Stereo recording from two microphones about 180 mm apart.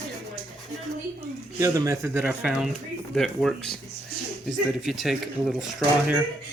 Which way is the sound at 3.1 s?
Centre (ahead or behind).